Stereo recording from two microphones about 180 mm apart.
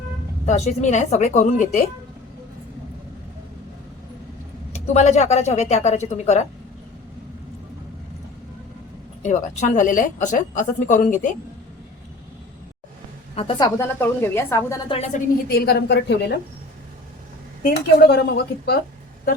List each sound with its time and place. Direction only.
0.4 s speech: 40° left (ahead or behind)
4.7 s speech: 40° left (ahead or behind)
9.2 s a woman's voice: 40° left (ahead or behind)
13.3 s a woman's voice: 30° left (ahead or behind); by 14.8 s 15° left (ahead or behind)
14.8 s speech: 35° left (ahead or behind)
15.4 s a woman's voice: 60° left (ahead or behind)
17.7 s a woman's voice: 60° left (ahead or behind)